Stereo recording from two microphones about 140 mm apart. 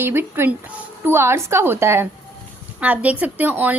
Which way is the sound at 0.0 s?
15° right (ahead or behind).